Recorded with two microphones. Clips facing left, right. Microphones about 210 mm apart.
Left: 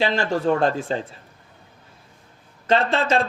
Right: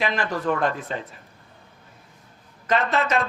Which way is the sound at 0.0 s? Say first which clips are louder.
Left 4 dB; 30° left (ahead or behind).